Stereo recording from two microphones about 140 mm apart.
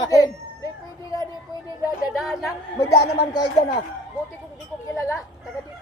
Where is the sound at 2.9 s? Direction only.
25° left (ahead or behind).